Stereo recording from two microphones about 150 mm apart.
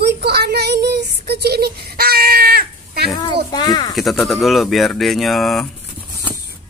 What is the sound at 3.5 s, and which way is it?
Speech, 25° left (ahead or behind).